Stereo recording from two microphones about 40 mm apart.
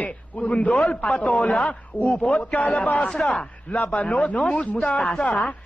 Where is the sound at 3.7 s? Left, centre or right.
Left.